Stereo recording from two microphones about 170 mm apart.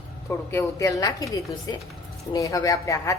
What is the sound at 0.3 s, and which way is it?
Speech, 15° left (ahead or behind).